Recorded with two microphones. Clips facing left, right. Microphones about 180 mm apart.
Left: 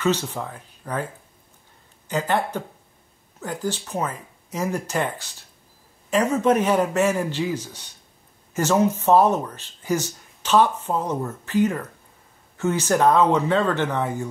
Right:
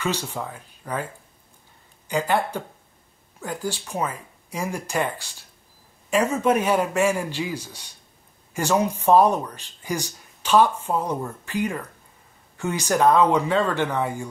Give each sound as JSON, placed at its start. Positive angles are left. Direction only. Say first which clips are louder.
{"t": 0.0, "sound": "speech", "louder": "left 4 dB", "side_deg": -10}
{"t": 2.0, "sound": "speech", "louder": "even", "side_deg": -10}
{"t": 6.3, "sound": "speech", "louder": "left 3 dB", "side_deg": -10}